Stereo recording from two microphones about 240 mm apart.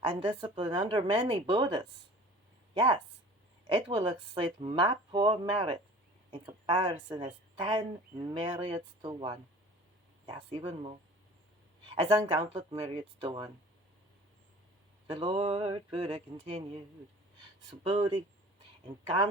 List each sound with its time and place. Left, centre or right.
0.0 s speech: right
11.9 s speech: centre
15.0 s speech: right
17.7 s speech: centre